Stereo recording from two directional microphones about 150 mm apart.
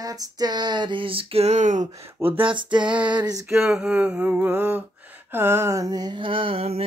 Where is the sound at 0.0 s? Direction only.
25° right (ahead or behind); by 1.9 s 55° right (ahead or behind).